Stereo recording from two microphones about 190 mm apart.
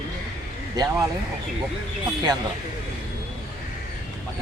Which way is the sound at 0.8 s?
20° right (ahead or behind).